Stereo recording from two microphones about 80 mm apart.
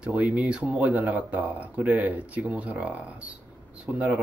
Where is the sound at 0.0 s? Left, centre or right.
Centre.